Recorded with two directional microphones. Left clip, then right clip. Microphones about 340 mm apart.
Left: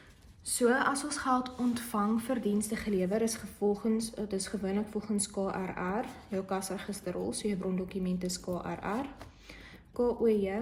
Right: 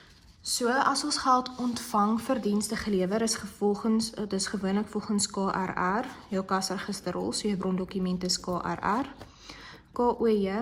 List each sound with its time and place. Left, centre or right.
0.4 s speech: centre